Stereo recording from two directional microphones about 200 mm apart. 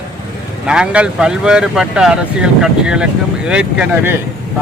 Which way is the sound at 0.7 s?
5° right (ahead or behind).